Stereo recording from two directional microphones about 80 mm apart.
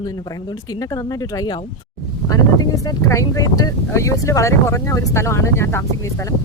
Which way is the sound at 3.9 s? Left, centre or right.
Left.